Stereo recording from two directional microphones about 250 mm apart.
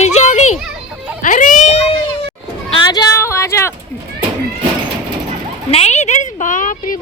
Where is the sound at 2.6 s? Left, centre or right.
Centre.